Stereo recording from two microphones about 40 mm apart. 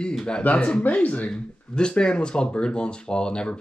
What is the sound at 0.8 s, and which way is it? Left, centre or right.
Speech, left.